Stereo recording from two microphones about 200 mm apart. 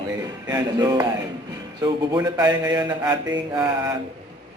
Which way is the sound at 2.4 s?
20° right (ahead or behind).